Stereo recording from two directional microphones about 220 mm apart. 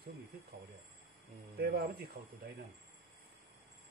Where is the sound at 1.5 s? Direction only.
45° right (ahead or behind).